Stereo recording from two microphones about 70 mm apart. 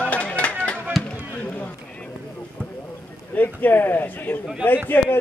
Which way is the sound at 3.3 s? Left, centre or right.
Left.